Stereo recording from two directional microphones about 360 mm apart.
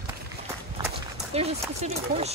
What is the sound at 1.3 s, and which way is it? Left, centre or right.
Speech, centre.